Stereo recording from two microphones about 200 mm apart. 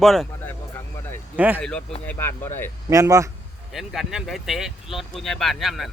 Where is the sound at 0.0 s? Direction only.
Centre (ahead or behind).